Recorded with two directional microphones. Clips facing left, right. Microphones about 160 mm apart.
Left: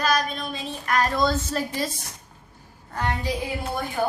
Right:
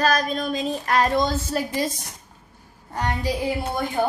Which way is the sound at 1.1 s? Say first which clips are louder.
Right 1 dB; 20° right (ahead or behind).